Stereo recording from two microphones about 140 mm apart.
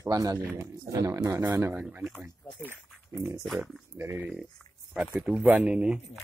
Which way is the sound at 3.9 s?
20° right (ahead or behind).